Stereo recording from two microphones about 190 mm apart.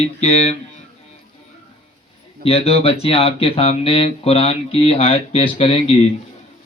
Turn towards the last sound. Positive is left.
turn(degrees=30)  # may be behind; listen again after turning